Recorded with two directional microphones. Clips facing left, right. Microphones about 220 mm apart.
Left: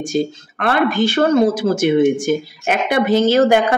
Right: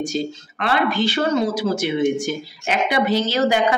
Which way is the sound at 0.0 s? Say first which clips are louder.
Left 4 dB; 50° left (ahead or behind).